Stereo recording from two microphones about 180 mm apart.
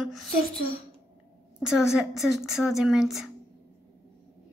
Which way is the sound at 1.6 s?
5° right (ahead or behind).